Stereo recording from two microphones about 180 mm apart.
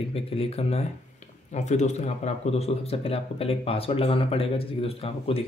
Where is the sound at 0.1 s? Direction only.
35° left (ahead or behind).